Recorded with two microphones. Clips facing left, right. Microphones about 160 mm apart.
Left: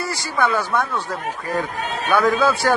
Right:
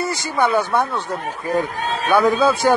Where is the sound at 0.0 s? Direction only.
20° right (ahead or behind).